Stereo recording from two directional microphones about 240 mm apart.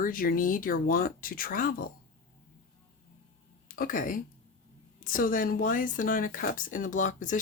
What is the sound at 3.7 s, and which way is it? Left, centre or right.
Speech, left.